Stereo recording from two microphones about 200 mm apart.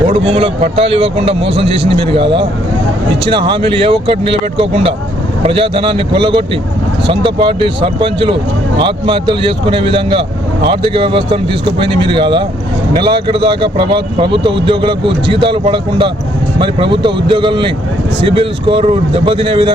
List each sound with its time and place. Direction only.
0.1 s speech: 30° right (ahead or behind)